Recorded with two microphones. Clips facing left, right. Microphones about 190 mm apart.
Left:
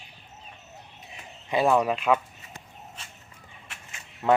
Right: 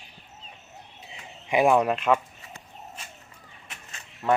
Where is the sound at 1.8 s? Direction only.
Centre (ahead or behind).